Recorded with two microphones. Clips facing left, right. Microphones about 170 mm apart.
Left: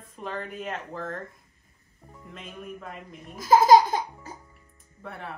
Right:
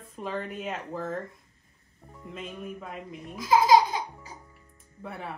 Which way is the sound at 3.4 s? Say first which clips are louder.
Left 3 dB; 45° left (ahead or behind).